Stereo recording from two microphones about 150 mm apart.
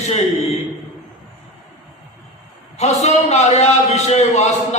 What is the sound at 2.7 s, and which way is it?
A man's voice, 45° left (ahead or behind).